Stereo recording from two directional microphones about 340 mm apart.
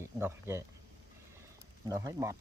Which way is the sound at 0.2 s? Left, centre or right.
Centre.